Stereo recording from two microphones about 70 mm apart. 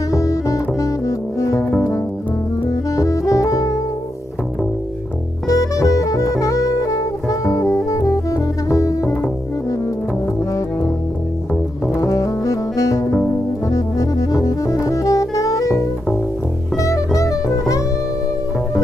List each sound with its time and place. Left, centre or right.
0.1 s music: left
5.5 s saxophone: left
11.9 s music: left